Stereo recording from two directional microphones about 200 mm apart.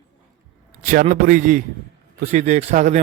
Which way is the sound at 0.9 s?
40° right (ahead or behind).